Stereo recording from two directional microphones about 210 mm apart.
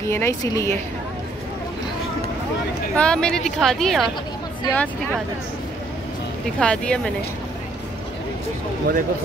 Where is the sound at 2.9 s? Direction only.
5° left (ahead or behind).